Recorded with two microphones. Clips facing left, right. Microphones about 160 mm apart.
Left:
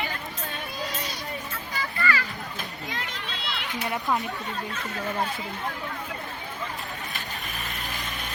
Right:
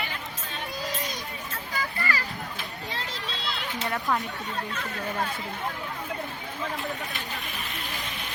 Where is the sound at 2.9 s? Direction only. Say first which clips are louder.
Right 2 dB; 35° right (ahead or behind).